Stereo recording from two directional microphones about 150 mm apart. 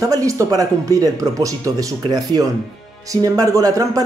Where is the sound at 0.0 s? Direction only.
20° right (ahead or behind).